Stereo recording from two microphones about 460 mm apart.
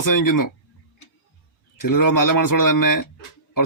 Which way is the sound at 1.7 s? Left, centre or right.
Left.